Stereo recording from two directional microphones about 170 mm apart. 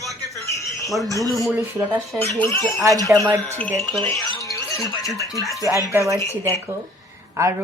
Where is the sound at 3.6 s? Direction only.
5° left (ahead or behind).